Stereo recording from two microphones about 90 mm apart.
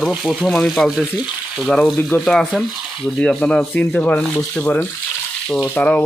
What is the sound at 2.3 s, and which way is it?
Speech, 5° left (ahead or behind).